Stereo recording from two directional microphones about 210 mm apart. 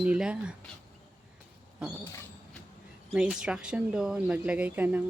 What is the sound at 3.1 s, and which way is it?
Speech, 5° right (ahead or behind).